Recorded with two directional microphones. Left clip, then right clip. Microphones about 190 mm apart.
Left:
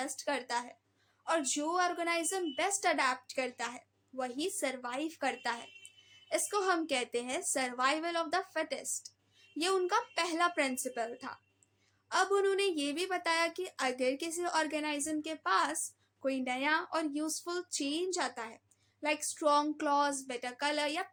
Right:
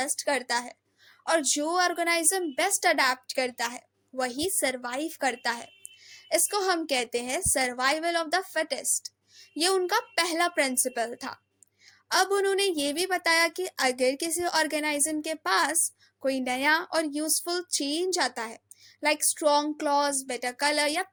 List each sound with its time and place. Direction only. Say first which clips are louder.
0.0 s a woman's voice: right 8 dB; 25° right (ahead or behind)